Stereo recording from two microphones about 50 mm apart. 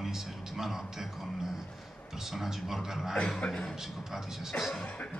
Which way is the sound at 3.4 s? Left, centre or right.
Left.